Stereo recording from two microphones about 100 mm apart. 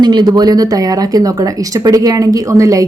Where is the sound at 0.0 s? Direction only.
45° right (ahead or behind).